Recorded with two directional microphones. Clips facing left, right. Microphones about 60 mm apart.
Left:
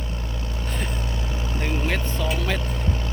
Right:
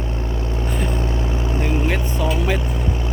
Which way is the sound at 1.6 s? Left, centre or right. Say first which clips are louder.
Right 3 dB; centre.